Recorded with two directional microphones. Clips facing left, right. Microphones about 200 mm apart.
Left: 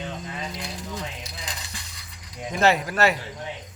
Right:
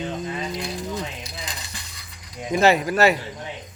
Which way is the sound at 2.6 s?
5° right (ahead or behind).